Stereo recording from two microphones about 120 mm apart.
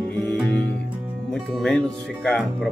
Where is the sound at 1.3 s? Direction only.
5° left (ahead or behind).